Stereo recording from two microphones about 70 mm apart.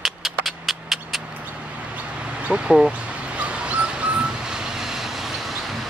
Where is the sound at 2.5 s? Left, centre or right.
Centre.